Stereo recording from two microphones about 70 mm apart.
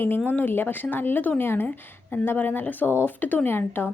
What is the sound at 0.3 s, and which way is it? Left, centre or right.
Speech, left.